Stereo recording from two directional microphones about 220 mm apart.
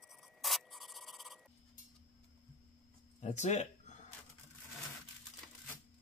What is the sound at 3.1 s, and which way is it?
Speech, 30° left (ahead or behind).